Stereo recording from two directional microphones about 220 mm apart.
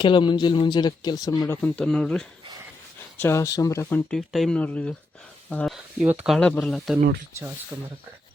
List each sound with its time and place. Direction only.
0.0 s speech: 20° left (ahead or behind); by 7.9 s 10° right (ahead or behind)